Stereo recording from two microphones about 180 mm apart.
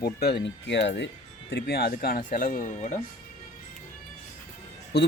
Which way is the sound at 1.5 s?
65° left (ahead or behind).